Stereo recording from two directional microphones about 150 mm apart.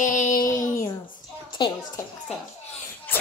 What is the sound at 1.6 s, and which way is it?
Speech, 30° left (ahead or behind).